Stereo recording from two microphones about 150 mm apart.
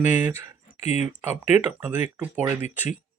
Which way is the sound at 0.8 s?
45° left (ahead or behind).